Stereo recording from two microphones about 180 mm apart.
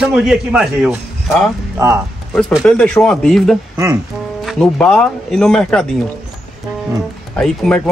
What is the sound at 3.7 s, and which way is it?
Speech, 20° right (ahead or behind).